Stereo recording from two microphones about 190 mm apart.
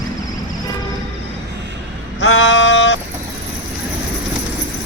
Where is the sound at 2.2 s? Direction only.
90° left; by 3.0 s 75° left (ahead or behind).